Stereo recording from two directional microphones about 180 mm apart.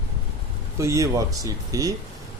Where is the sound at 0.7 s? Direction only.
15° right (ahead or behind).